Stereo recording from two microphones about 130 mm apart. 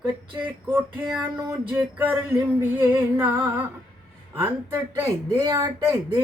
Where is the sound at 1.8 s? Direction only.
10° right (ahead or behind).